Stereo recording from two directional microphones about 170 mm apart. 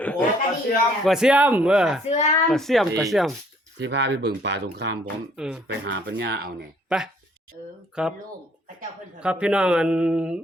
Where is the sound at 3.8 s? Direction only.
90° right.